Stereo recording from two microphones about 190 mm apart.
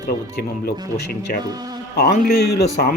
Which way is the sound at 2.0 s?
55° left (ahead or behind).